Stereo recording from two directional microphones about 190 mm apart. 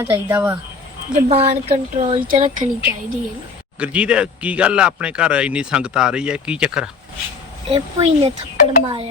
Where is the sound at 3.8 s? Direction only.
5° right (ahead or behind).